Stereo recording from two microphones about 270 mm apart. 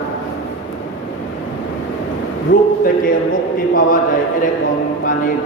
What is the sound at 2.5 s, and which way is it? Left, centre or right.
Speech, left.